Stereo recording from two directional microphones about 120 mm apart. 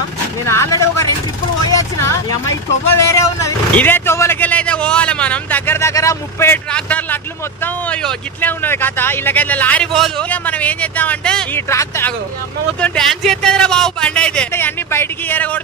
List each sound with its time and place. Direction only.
0.5 s speech: 25° left (ahead or behind)
1.6 s a sound: 25° left (ahead or behind)
3.1 s a man's voice: 25° left (ahead or behind)
6.5 s speech: 10° left (ahead or behind)
9.9 s a man's voice: centre (ahead or behind)
10.3 s speech: 15° left (ahead or behind)
11.7 s speech: 25° left (ahead or behind)
12.8 s speech: 5° left (ahead or behind)
14.5 s speech: 20° left (ahead or behind)